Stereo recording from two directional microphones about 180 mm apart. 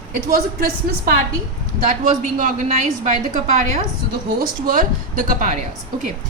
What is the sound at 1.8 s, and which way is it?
A woman's voice, 45° right (ahead or behind).